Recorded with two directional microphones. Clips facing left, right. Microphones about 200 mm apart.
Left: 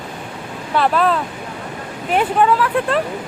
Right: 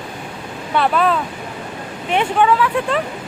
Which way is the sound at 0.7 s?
Centre (ahead or behind).